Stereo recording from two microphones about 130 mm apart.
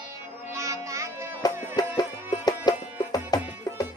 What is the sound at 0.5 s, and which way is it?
Music, 25° right (ahead or behind).